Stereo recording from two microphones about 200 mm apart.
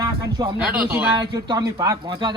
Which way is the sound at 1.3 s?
20° right (ahead or behind).